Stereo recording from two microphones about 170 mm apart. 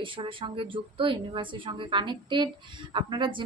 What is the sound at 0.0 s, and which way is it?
Speech, 30° right (ahead or behind).